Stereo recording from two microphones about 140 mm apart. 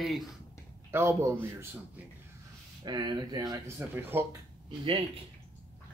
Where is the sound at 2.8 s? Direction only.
30° right (ahead or behind); by 4.2 s 15° right (ahead or behind).